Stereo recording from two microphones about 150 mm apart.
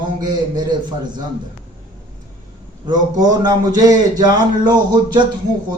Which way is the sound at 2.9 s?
25° right (ahead or behind).